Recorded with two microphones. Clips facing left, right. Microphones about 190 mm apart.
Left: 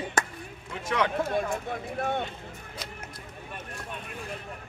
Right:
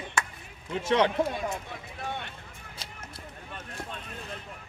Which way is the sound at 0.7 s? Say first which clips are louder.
Right 4 dB; 25° right (ahead or behind).